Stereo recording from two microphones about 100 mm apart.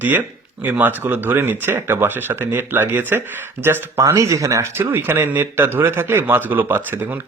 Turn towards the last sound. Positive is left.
turn(degrees=-20)  # may be behind; listen again after turning